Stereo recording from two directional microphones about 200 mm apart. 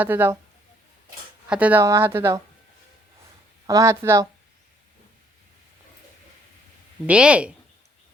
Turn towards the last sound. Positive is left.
turn(degrees=-5)  # may be behind; listen again after turning